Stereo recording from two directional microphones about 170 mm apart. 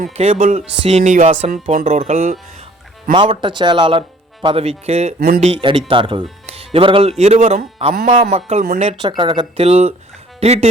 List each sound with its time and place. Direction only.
0.2 s music: 45° right (ahead or behind)
3.1 s speech: 30° right (ahead or behind)
4.4 s music: 35° right (ahead or behind)
5.5 s speech: 30° right (ahead or behind)
6.4 s music: 35° right (ahead or behind)
8.6 s speech: 60° right (ahead or behind)
8.9 s speech: 30° right (ahead or behind)
10.4 s music: 40° right (ahead or behind)